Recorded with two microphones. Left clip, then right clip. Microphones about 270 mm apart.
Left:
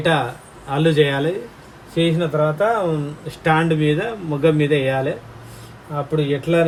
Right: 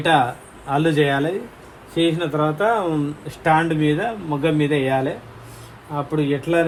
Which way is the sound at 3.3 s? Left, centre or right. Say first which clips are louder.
Even; centre.